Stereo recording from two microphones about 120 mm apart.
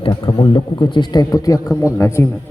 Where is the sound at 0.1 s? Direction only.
40° left (ahead or behind).